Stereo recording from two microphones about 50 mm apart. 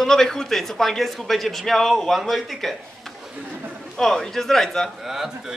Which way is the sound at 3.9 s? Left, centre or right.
Centre.